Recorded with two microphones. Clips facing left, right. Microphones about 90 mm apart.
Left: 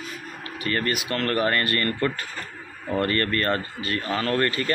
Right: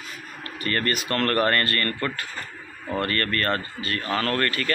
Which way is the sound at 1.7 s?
20° left (ahead or behind).